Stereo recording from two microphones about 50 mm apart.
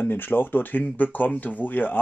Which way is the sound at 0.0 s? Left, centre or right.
Left.